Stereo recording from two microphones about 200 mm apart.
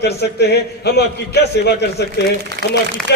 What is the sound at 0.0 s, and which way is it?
A man's voice, 55° left (ahead or behind).